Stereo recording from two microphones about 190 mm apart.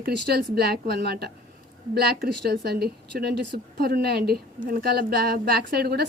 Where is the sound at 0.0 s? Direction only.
60° right (ahead or behind).